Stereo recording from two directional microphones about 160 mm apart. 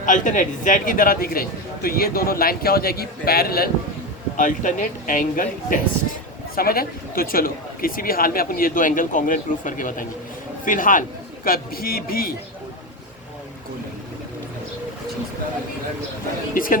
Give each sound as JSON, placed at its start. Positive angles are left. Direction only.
{"t": 0.0, "sound": "speech", "side_deg": 50}
{"t": 4.4, "sound": "speech", "side_deg": 55}
{"t": 6.6, "sound": "speech", "side_deg": 70}
{"t": 16.6, "sound": "speech", "side_deg": 60}